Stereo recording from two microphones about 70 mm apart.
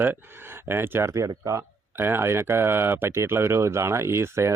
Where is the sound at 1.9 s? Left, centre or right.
Right.